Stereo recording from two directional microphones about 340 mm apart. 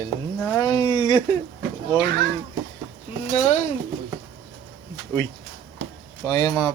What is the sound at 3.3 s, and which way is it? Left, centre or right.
Speech, centre.